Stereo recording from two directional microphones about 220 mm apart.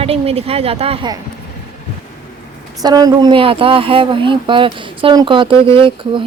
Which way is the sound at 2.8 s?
15° right (ahead or behind).